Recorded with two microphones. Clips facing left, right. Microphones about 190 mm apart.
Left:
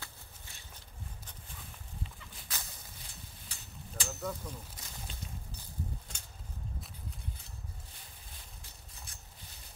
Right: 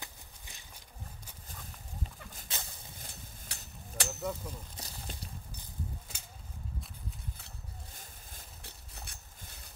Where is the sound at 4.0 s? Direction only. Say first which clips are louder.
Right 3 dB; 70° right (ahead or behind).